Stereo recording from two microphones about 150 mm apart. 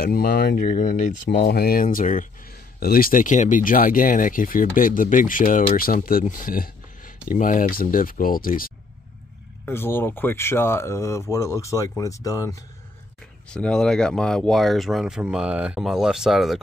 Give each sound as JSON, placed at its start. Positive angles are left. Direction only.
{"t": 0.0, "sound": "speech", "side_deg": 90}
{"t": 5.8, "sound": "speech", "side_deg": 75}
{"t": 9.7, "sound": "speech", "side_deg": 15}
{"t": 13.5, "sound": "speech", "side_deg": 5}